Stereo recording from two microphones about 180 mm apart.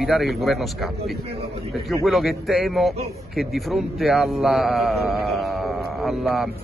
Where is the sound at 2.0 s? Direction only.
Centre (ahead or behind).